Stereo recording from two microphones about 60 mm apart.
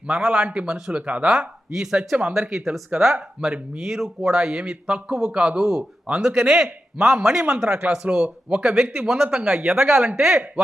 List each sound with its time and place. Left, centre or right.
0.1 s speech: centre
1.3 s speech: centre
5.5 s speech: centre
7.7 s speech: right
8.1 s speech: centre